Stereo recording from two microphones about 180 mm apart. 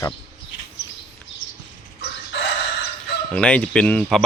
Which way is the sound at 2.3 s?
70° left (ahead or behind).